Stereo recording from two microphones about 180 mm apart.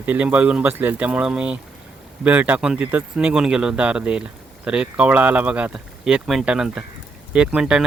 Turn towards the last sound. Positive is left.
turn(degrees=-5)  # may be behind; listen again after turning